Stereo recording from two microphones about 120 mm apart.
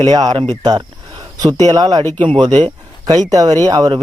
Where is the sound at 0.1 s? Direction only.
35° right (ahead or behind).